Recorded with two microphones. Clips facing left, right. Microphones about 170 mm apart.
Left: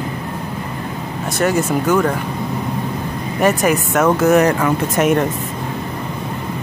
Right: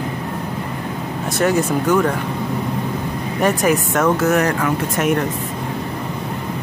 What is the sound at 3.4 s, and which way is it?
Speech, 5° left (ahead or behind).